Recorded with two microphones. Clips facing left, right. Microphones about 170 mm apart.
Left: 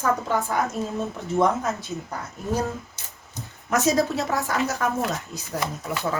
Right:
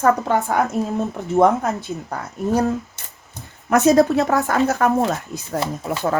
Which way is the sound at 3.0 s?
60° right (ahead or behind).